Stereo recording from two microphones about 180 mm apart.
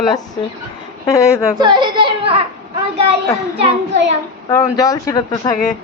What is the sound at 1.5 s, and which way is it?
Children playing, 25° right (ahead or behind).